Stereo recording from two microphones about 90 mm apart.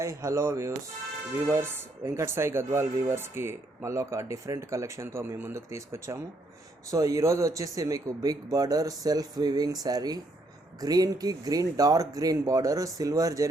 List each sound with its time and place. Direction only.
0.0 s speech: 35° right (ahead or behind)